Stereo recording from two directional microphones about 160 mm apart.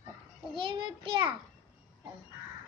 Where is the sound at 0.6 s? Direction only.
30° right (ahead or behind).